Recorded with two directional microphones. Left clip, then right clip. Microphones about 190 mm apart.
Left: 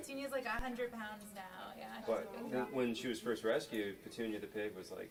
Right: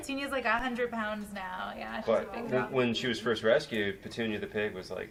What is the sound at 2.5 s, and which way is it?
Speech, 35° right (ahead or behind).